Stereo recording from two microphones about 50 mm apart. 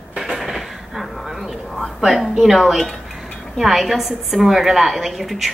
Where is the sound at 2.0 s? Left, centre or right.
Centre.